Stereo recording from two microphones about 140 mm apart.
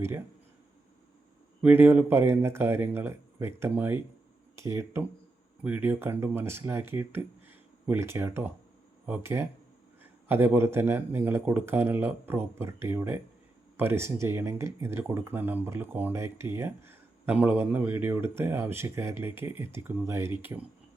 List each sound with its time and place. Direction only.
1.6 s speech: 15° right (ahead or behind)